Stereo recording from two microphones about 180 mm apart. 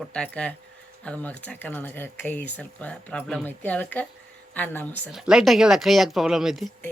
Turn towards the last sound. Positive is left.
turn(degrees=0)  # may be behind; listen again after turning